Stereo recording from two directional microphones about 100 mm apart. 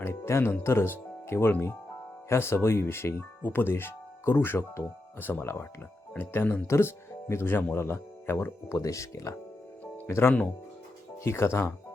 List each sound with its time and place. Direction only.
0.0 s music: 25° left (ahead or behind)
0.6 s speech: 25° left (ahead or behind)